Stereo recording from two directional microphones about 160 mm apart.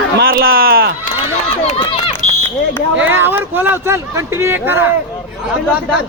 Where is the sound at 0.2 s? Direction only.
75° right (ahead or behind).